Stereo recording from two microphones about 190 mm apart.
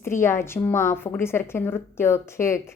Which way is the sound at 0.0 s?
15° left (ahead or behind).